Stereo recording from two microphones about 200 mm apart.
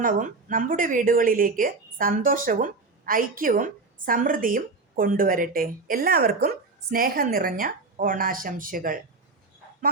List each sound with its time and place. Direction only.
0.0 s speech: 40° right (ahead or behind)